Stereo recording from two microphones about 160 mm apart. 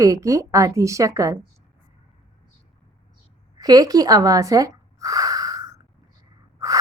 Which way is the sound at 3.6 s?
25° right (ahead or behind).